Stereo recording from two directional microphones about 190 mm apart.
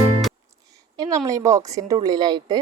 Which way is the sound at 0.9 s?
20° right (ahead or behind).